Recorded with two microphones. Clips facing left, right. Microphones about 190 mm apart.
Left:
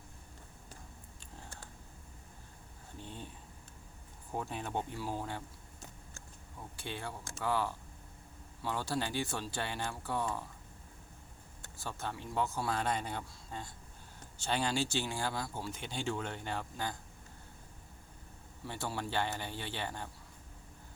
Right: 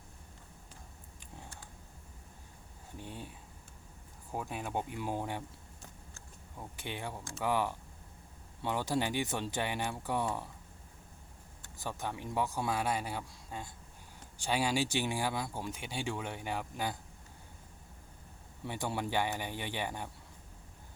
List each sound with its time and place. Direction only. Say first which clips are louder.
3.0 s a sound: right 2 dB; 10° right (ahead or behind)
4.3 s speech: even; 10° right (ahead or behind)
6.7 s speech: right 1 dB; 20° right (ahead or behind)
11.8 s speech: right 2 dB; 15° right (ahead or behind)
18.6 s speech: right 3 dB; 20° right (ahead or behind)